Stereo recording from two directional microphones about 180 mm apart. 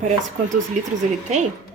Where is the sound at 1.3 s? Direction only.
40° right (ahead or behind).